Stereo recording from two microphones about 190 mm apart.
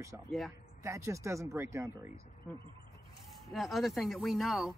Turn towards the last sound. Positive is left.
turn(degrees=0)  # may be behind; listen again after turning